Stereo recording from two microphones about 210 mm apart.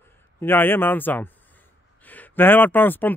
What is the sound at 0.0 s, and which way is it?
A man's voice, 10° left (ahead or behind).